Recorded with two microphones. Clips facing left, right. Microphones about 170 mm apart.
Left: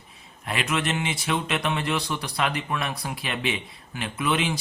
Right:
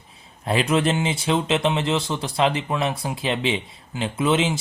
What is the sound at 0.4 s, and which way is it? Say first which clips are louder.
Speech: right 7 dB; 30° right (ahead or behind).